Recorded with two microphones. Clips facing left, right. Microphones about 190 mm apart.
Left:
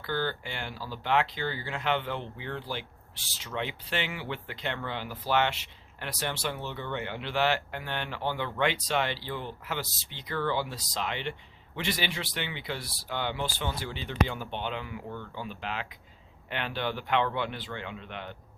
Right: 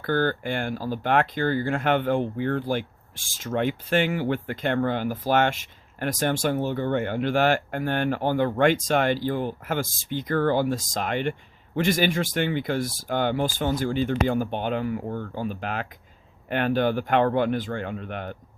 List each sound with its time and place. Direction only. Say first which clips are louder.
0.0 s speech: right 8 dB; 50° right (ahead or behind)